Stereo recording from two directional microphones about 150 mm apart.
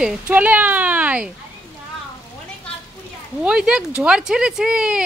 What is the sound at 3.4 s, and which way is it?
Speech, 5° right (ahead or behind).